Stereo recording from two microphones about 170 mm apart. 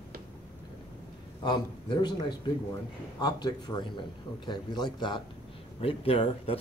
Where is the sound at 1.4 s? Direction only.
25° left (ahead or behind).